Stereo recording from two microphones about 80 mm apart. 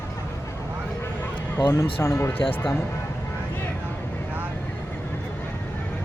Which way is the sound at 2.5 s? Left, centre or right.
Left.